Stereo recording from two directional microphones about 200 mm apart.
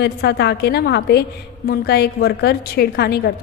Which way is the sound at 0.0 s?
55° left (ahead or behind).